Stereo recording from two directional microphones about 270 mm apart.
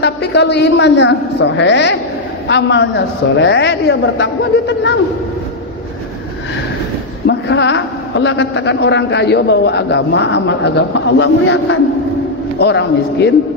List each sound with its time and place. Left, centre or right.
0.0 s a woman's voice: left
7.2 s a woman's voice: left